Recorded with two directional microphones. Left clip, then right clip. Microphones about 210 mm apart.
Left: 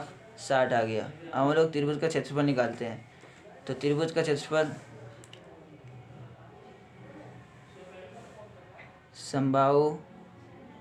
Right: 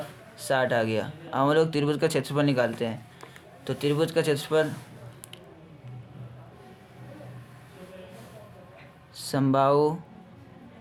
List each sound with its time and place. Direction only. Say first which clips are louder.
0.3 s speech: right 1 dB; 30° right (ahead or behind)
9.1 s speech: right 2 dB; 35° right (ahead or behind)